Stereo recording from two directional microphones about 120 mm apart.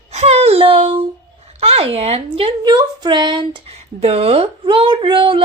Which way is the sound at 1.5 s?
60° right (ahead or behind).